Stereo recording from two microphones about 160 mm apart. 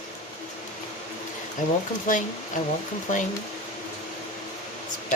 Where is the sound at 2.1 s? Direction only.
55° left (ahead or behind).